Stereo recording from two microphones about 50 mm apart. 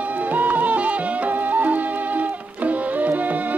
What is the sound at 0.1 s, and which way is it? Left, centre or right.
Music, right.